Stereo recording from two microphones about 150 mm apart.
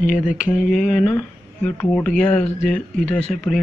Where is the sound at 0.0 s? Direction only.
60° left (ahead or behind).